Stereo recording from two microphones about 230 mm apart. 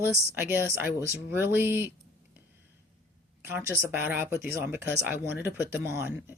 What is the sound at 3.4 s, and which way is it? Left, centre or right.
Speech, centre.